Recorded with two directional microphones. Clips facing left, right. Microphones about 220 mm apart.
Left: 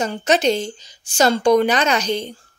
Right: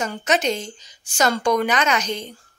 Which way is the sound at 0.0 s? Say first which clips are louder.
Left 4 dB; 30° left (ahead or behind).